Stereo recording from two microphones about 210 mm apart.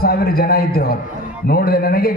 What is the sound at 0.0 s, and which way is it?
A man's voice, 45° left (ahead or behind).